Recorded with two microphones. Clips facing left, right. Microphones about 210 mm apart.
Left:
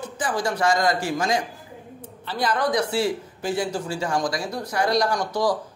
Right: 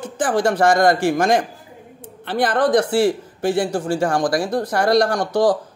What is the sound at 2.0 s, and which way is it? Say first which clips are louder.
Speech: right 7 dB; 65° right (ahead or behind).